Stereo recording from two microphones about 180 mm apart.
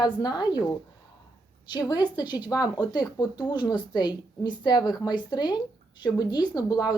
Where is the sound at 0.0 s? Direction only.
20° left (ahead or behind).